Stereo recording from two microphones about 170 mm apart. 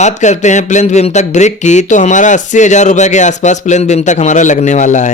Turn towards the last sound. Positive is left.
turn(degrees=45)  # may be behind; listen again after turning